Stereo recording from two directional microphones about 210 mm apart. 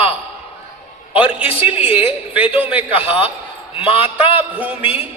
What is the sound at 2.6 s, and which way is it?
Speech, 5° right (ahead or behind).